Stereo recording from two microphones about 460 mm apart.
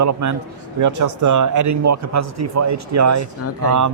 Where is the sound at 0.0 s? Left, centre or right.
Right.